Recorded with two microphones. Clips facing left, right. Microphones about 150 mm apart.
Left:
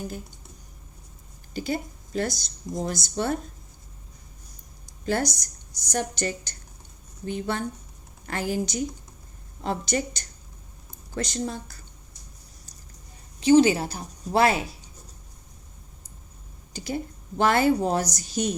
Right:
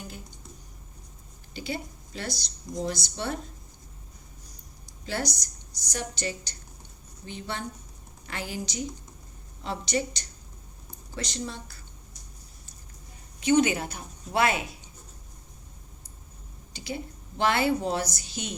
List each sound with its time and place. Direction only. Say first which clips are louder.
1.5 s a woman's voice: left 5 dB; 45° left (ahead or behind)
4.9 s a woman's voice: left 6 dB; 50° left (ahead or behind)
13.4 s a woman's voice: left 5 dB; 30° left (ahead or behind)
16.7 s a woman's voice: left 5 dB; 45° left (ahead or behind)